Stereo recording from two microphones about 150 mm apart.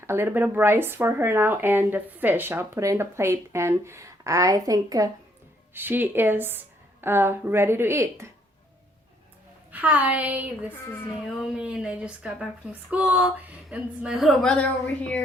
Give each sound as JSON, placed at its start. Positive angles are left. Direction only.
{"t": 0.0, "sound": "speech", "side_deg": -15}
{"t": 5.7, "sound": "speech", "side_deg": -15}
{"t": 9.7, "sound": "speech", "side_deg": -10}